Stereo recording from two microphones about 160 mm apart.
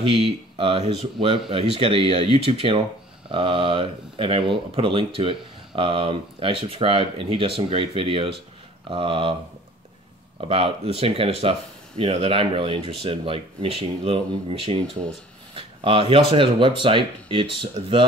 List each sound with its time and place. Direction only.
0.1 s speech: 35° right (ahead or behind)
10.5 s speech: 35° right (ahead or behind)